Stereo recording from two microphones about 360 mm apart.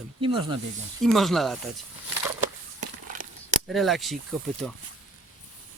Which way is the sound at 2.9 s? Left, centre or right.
Right.